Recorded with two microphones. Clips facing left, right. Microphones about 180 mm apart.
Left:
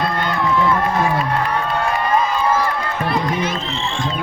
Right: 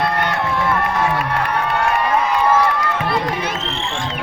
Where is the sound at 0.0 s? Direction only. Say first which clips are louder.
Even; 70° right (ahead or behind).